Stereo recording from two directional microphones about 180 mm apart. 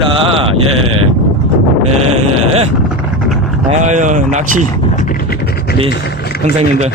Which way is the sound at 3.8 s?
45° right (ahead or behind).